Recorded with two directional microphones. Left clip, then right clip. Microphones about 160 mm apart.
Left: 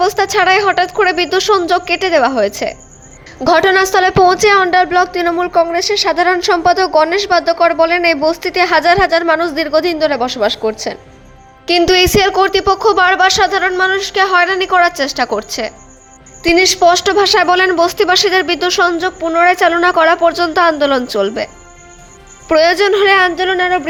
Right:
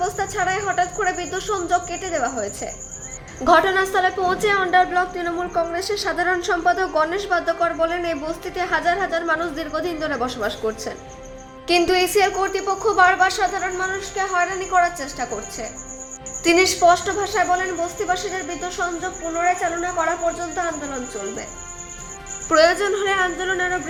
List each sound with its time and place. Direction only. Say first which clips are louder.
0.0 s a woman's voice: left 11 dB; 50° left (ahead or behind)
10.0 s a woman's voice: left 10 dB; 30° left (ahead or behind)
11.9 s speech: left 7 dB; 45° left (ahead or behind)
16.4 s a woman's voice: left 6 dB; 25° left (ahead or behind)
16.8 s a woman's voice: left 7 dB; 50° left (ahead or behind)